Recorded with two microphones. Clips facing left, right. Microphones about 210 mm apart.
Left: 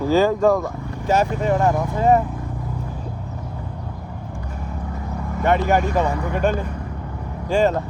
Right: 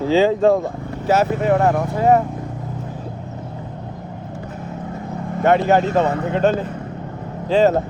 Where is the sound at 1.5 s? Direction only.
60° right (ahead or behind).